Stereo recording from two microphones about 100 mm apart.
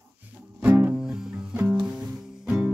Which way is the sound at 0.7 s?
20° right (ahead or behind).